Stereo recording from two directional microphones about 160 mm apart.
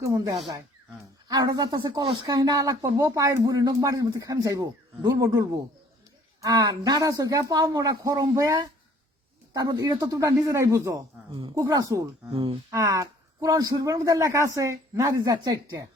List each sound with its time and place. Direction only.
0.0 s speech: 20° right (ahead or behind)
12.3 s speech: 35° right (ahead or behind)
12.7 s speech: 20° right (ahead or behind)